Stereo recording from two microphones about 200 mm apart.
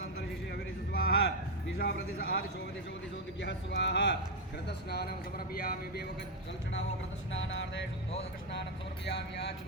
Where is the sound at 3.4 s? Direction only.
60° left (ahead or behind).